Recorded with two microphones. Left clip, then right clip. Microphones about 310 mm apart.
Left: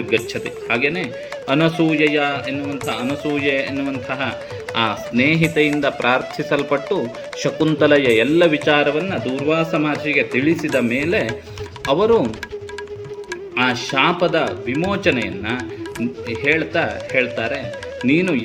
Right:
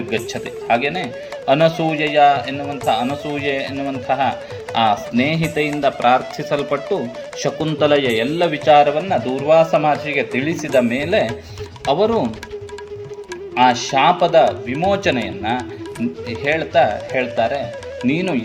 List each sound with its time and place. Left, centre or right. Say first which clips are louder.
0.7 s speech: right 2 dB; centre
13.6 s speech: right 4 dB; centre